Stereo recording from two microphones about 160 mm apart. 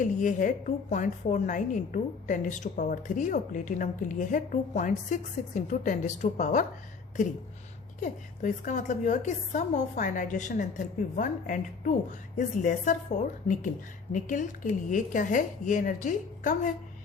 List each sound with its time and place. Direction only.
0.0 s a woman's voice: 55° left (ahead or behind)
8.0 s a woman's voice: 50° left (ahead or behind)